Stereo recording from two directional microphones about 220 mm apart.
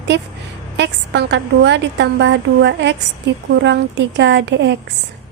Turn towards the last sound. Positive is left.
turn(degrees=-50)  # may be behind; listen again after turning